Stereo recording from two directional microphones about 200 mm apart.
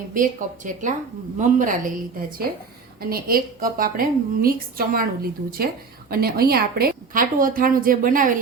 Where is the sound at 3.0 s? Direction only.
50° right (ahead or behind).